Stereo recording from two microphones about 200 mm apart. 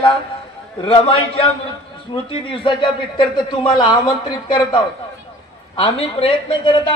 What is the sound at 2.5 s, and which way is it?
A man's voice, 25° left (ahead or behind).